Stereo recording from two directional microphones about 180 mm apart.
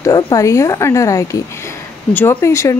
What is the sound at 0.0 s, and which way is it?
Speech, 20° left (ahead or behind).